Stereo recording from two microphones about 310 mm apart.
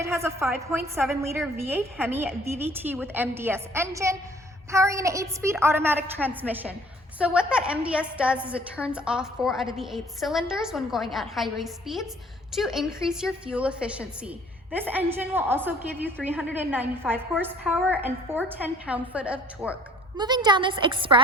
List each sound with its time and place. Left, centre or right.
0.0 s a woman's voice: centre